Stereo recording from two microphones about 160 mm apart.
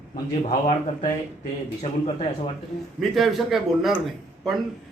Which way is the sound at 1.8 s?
40° left (ahead or behind).